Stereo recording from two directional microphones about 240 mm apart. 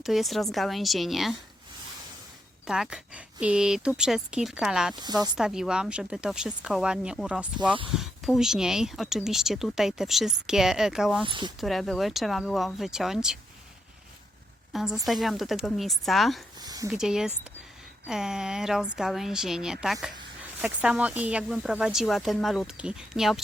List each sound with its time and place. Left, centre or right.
0.0 s speech: centre
2.6 s speech: centre
11.2 s speech: centre
11.6 s speech: centre
14.7 s speech: centre
16.6 s speech: centre
16.9 s speech: centre